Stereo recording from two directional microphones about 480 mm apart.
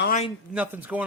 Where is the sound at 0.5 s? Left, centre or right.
Centre.